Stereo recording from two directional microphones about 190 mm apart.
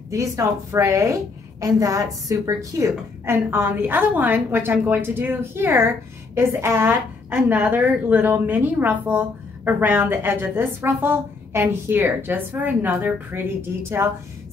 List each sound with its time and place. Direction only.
0.1 s a woman's voice: 15° right (ahead or behind)